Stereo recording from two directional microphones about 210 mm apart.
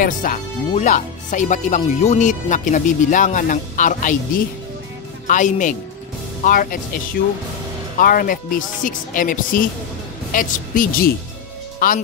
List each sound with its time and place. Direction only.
0.0 s speech: 40° left (ahead or behind)
5.2 s speech: 35° left (ahead or behind)
8.0 s speech: 45° left (ahead or behind)